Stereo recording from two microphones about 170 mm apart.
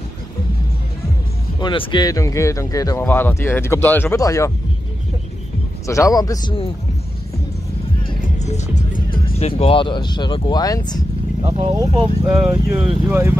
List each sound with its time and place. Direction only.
1.6 s speech: 30° left (ahead or behind)
5.9 s speech: 20° left (ahead or behind)
8.4 s music: 40° left (ahead or behind)
9.4 s speech: 35° left (ahead or behind)
11.4 s speech: 40° right (ahead or behind)
12.4 s speech: 10° right (ahead or behind)